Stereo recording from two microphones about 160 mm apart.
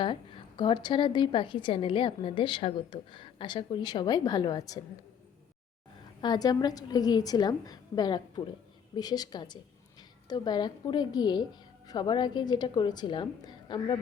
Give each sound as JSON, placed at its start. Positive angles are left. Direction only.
{"t": 0.0, "sound": "a woman's voice", "side_deg": 30}
{"t": 6.2, "sound": "a woman's voice", "side_deg": 25}